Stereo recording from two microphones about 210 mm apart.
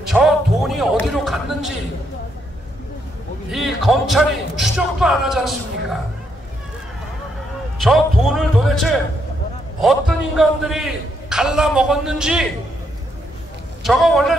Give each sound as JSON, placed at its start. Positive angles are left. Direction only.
{"t": 0.0, "sound": "speech", "side_deg": 0}
{"t": 3.5, "sound": "a man's voice", "side_deg": 0}
{"t": 7.8, "sound": "a man's voice", "side_deg": 0}
{"t": 13.8, "sound": "a man's voice", "side_deg": 0}